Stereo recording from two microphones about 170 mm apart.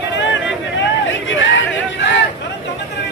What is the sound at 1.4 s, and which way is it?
Speech, 90° left.